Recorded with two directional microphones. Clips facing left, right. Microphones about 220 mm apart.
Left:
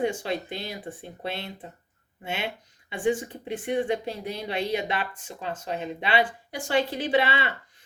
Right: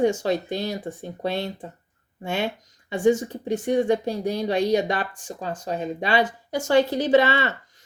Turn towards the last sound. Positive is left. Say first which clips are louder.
# right 6 dB
turn(degrees=-45)  # may be behind; listen again after turning